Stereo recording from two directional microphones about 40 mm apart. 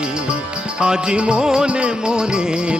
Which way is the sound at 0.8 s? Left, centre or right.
Right.